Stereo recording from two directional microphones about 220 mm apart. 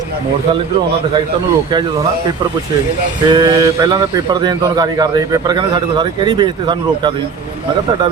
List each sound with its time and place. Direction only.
3.2 s a man's voice: 15° right (ahead or behind)